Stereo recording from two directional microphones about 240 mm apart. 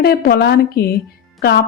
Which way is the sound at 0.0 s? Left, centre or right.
Left.